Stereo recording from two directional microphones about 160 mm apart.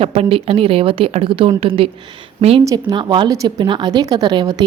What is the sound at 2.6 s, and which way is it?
A woman's voice, 20° right (ahead or behind).